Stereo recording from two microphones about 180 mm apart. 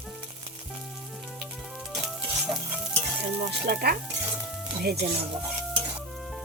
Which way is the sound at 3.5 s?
60° right (ahead or behind).